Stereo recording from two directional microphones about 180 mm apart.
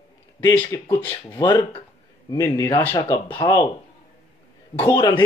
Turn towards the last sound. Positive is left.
turn(degrees=25)  # may be behind; listen again after turning